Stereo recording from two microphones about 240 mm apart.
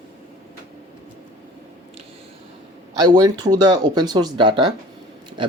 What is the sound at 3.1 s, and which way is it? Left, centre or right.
Speech, centre.